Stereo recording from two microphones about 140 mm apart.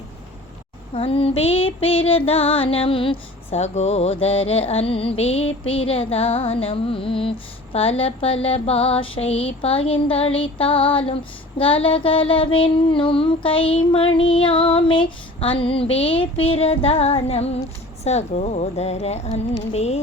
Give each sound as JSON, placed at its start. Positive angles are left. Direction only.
{"t": 0.9, "sound": "female singing", "side_deg": 45}
{"t": 18.0, "sound": "a woman's voice", "side_deg": 50}